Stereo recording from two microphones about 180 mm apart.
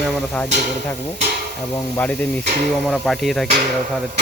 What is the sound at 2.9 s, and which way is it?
Speech, 5° right (ahead or behind).